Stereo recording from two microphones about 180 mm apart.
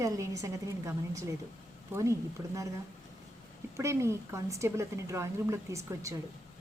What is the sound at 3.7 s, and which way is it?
Speech, 15° right (ahead or behind).